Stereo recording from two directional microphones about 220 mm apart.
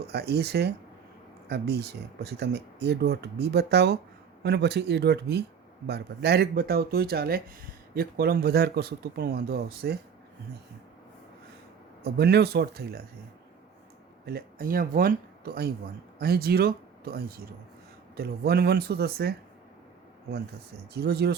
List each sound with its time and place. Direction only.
0.1 s speech: 50° right (ahead or behind)
12.0 s speech: 45° right (ahead or behind)
14.3 s speech: 40° right (ahead or behind)
20.9 s speech: 45° right (ahead or behind)